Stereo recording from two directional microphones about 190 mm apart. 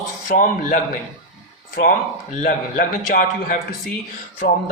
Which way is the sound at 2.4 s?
45° left (ahead or behind).